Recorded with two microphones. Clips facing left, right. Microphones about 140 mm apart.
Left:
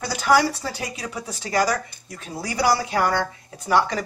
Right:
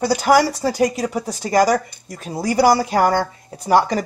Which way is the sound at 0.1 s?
40° right (ahead or behind).